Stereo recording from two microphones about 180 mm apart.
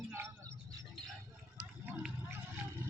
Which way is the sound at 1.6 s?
5° right (ahead or behind).